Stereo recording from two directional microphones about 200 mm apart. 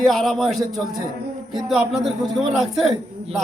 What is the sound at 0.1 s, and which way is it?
A man's voice, centre (ahead or behind).